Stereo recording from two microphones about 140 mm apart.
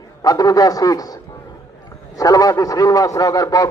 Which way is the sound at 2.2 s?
25° left (ahead or behind).